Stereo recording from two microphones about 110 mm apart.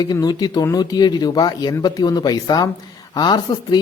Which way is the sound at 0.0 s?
40° left (ahead or behind).